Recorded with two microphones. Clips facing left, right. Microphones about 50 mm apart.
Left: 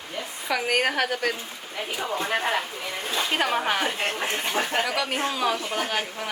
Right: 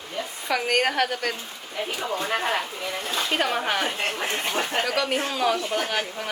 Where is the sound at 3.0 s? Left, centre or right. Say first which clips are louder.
Left 1 dB; centre.